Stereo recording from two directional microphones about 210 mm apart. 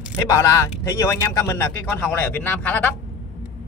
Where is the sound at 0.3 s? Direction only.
15° left (ahead or behind).